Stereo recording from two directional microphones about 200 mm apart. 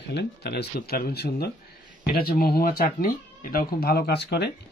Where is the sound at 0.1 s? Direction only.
55° left (ahead or behind).